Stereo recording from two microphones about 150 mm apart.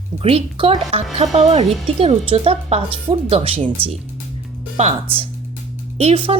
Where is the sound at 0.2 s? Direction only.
40° right (ahead or behind).